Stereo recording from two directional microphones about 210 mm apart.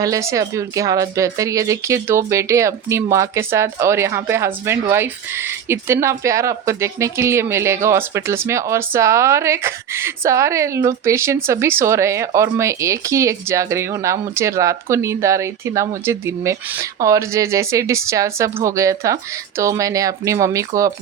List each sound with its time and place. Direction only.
0.0 s speech: 15° right (ahead or behind)